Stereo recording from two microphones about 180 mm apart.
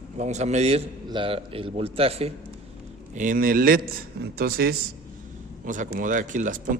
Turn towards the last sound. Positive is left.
turn(degrees=-45)  # may be behind; listen again after turning